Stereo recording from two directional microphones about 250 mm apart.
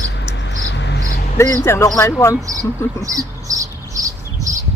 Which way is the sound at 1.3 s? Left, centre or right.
Centre.